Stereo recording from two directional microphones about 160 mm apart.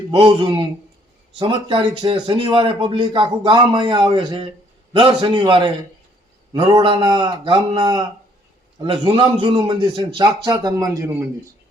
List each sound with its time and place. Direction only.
0.1 s a man's voice: 35° right (ahead or behind); by 11.3 s 15° right (ahead or behind)